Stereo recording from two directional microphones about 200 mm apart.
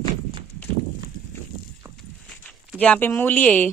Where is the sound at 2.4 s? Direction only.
5° left (ahead or behind).